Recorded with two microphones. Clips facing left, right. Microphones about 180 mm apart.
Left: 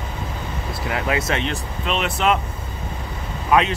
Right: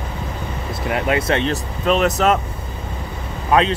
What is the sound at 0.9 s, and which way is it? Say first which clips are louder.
Speech: right 4 dB; 30° right (ahead or behind).